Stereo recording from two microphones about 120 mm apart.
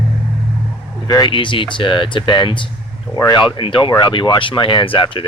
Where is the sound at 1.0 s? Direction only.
30° left (ahead or behind).